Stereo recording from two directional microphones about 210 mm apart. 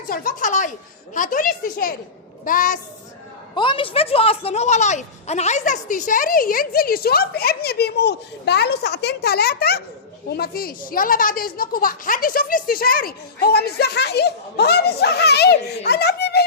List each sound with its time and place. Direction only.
0.1 s speech: 40° left (ahead or behind)
3.5 s speech: 25° left (ahead or behind); by 16.4 s 50° left (ahead or behind)